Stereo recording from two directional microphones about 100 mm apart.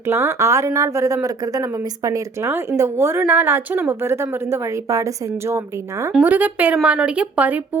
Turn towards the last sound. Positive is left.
turn(degrees=-15)  # may be behind; listen again after turning